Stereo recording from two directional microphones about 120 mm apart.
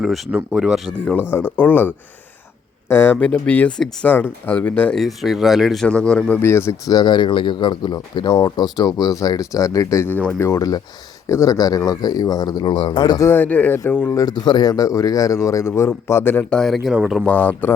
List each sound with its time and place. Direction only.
0.0 s speech: centre (ahead or behind)
1.3 s speech: 15° left (ahead or behind)
2.9 s speech: 15° left (ahead or behind)
6.2 s speech: 20° left (ahead or behind)
6.9 s speech: 40° left (ahead or behind)
13.2 s speech: 15° left (ahead or behind)
14.2 s speech: 35° left (ahead or behind); by 16.6 s 15° left (ahead or behind)
16.6 s speech: centre (ahead or behind)
17.2 s speech: 15° left (ahead or behind)